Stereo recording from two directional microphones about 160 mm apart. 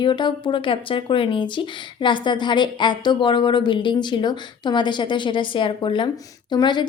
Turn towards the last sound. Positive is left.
turn(degrees=30)  # may be behind; listen again after turning